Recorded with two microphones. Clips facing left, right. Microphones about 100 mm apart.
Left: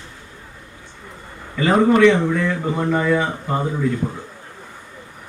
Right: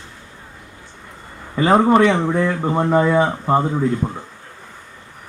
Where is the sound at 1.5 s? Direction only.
35° right (ahead or behind).